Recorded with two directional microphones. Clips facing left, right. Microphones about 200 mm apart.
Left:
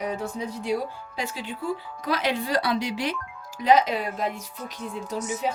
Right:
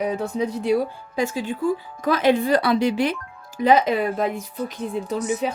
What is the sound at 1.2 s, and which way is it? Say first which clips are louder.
A woman's voice: right 9 dB; 45° right (ahead or behind).